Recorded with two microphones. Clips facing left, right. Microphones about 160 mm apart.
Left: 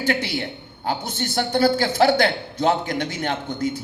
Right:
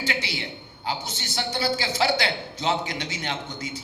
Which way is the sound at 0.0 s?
50° left (ahead or behind).